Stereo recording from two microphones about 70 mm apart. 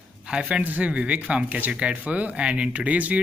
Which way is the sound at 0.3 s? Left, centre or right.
Centre.